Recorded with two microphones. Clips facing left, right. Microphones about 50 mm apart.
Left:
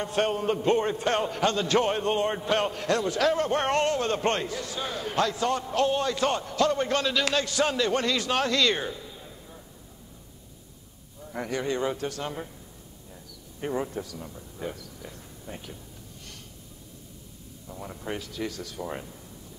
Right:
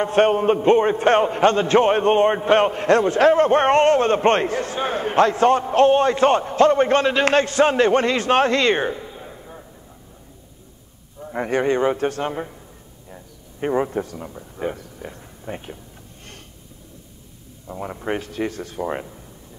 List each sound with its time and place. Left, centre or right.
0.0 s a man's voice: right
11.1 s a man's voice: right
17.6 s a man's voice: right